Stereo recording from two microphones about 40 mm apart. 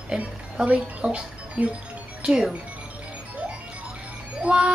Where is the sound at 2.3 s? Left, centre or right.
Centre.